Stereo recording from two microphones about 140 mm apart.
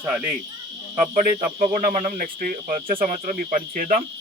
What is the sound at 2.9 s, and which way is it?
Speech, 75° right (ahead or behind).